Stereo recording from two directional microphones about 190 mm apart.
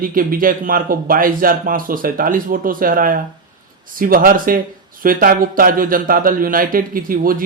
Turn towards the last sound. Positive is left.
turn(degrees=-50)  # may be behind; listen again after turning